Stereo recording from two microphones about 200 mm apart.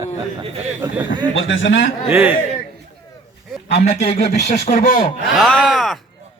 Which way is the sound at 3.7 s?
35° left (ahead or behind).